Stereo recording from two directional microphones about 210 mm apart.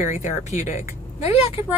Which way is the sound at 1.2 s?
30° left (ahead or behind).